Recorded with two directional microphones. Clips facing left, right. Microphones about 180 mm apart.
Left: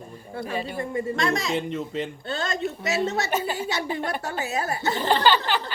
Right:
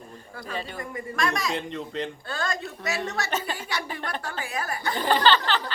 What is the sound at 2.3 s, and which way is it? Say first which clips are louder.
A woman's voice: left 5 dB; 25° left (ahead or behind).